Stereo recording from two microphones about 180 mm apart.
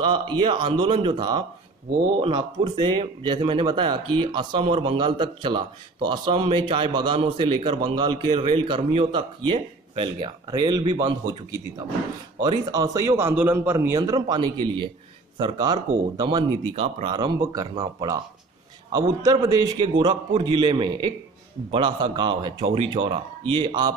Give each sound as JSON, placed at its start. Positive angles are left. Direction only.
{"t": 0.0, "sound": "speech", "side_deg": -25}
{"t": 10.2, "sound": "speech", "side_deg": -25}
{"t": 12.4, "sound": "speech", "side_deg": -20}